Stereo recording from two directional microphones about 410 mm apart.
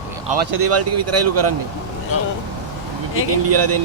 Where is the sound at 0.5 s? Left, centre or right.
Right.